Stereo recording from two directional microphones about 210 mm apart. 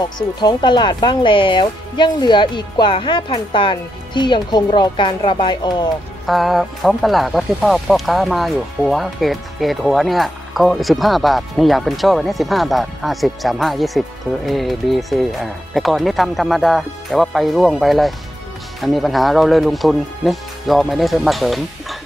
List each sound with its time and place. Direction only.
0.4 s speech: 20° left (ahead or behind)
6.2 s speech: centre (ahead or behind)